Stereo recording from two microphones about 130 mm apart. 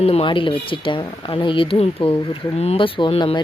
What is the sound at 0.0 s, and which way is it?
Speech, 50° left (ahead or behind).